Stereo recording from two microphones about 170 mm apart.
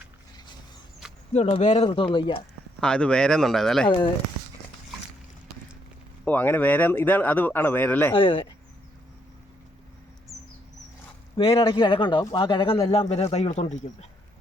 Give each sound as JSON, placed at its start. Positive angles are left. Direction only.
{"t": 1.3, "sound": "speech", "side_deg": 40}
{"t": 2.8, "sound": "speech", "side_deg": 5}
{"t": 3.8, "sound": "speech", "side_deg": 30}
{"t": 6.2, "sound": "speech", "side_deg": 10}
{"t": 8.1, "sound": "speech", "side_deg": 30}
{"t": 11.3, "sound": "speech", "side_deg": 35}